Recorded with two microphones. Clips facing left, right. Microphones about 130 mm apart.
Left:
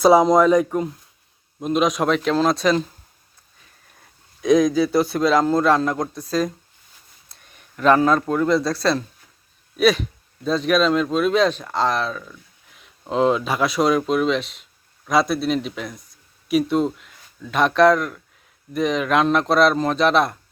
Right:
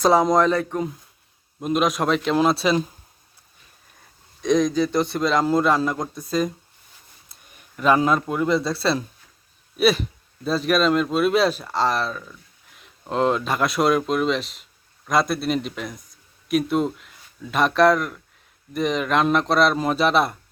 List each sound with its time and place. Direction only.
0.0 s speech: 10° left (ahead or behind)
1.5 s a man's voice: centre (ahead or behind)
4.4 s a man's voice: 5° left (ahead or behind)
7.5 s a man's voice: 5° right (ahead or behind)